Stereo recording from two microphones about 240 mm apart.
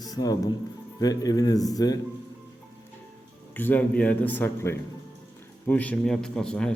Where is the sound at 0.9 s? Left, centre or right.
Centre.